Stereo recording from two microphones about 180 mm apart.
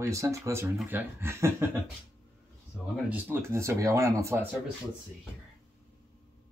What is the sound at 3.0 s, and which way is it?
Speech, 10° right (ahead or behind).